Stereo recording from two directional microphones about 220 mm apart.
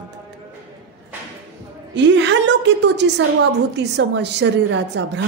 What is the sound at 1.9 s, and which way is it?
A woman's voice, 55° right (ahead or behind).